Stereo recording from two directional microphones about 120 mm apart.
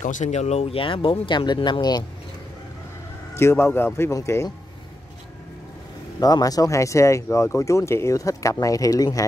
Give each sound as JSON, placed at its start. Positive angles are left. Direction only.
{"t": 0.0, "sound": "speech", "side_deg": 90}
{"t": 3.3, "sound": "speech", "side_deg": 20}
{"t": 6.1, "sound": "speech", "side_deg": 30}